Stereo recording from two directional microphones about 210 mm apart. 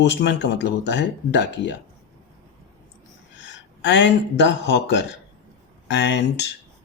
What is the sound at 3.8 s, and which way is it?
Speech, 60° left (ahead or behind).